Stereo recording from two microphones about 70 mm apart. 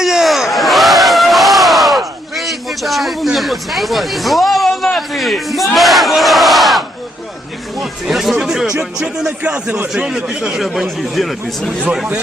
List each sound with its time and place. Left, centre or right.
0.0 s a sound: centre
3.3 s speech: centre
8.8 s music: centre
9.9 s speech: centre